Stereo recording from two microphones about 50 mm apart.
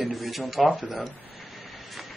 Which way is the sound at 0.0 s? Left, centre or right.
Centre.